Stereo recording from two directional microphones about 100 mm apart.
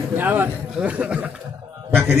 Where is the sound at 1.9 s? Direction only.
25° right (ahead or behind).